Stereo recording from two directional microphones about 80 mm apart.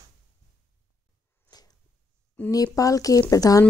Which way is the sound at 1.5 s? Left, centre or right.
Left.